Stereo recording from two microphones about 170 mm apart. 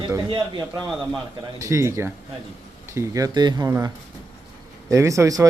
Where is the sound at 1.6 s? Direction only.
20° right (ahead or behind).